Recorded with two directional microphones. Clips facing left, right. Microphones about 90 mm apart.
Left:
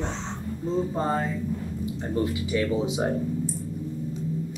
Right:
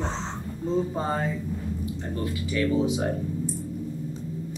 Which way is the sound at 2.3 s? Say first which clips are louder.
Even; 20° left (ahead or behind).